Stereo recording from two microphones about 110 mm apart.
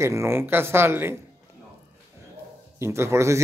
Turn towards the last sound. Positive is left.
turn(degrees=-25)  # may be behind; listen again after turning